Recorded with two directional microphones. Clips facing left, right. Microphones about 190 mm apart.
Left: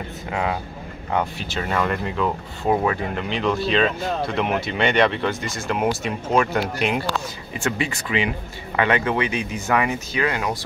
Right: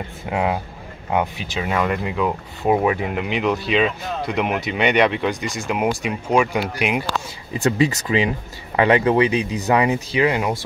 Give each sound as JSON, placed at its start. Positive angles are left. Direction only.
{"t": 0.3, "sound": "speech", "side_deg": -20}
{"t": 7.6, "sound": "speech", "side_deg": -35}